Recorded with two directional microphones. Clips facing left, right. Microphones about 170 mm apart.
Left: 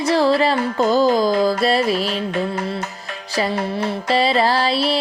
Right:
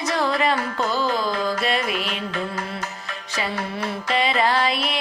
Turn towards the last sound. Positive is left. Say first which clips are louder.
# left 4 dB
turn(degrees=30)  # may be behind; listen again after turning